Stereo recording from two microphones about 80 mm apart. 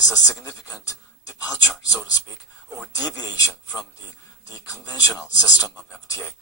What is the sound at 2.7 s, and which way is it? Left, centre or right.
Speech, left.